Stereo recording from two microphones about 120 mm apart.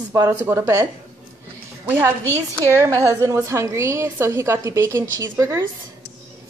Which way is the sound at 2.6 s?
25° right (ahead or behind).